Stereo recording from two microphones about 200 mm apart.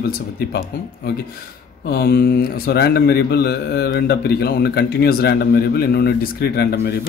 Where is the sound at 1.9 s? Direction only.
50° left (ahead or behind).